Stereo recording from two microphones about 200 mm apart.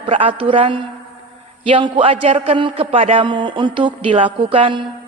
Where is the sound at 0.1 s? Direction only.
25° right (ahead or behind).